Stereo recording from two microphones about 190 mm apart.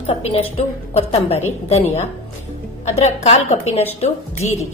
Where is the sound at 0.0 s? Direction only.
30° left (ahead or behind).